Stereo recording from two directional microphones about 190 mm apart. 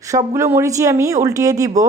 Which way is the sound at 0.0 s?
15° right (ahead or behind).